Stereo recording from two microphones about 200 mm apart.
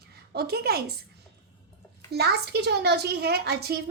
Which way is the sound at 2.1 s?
55° right (ahead or behind).